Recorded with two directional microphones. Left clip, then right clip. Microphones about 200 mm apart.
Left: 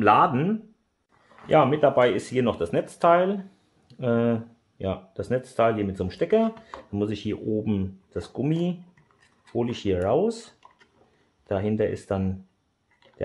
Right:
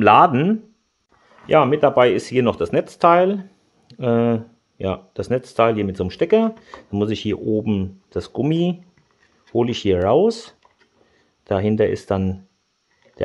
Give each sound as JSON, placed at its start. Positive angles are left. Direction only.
{"t": 0.0, "sound": "speech", "side_deg": -45}